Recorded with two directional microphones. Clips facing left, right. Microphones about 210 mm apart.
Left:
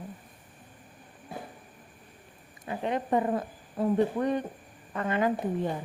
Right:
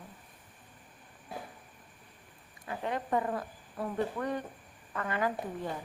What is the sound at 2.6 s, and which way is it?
Speech, 20° left (ahead or behind).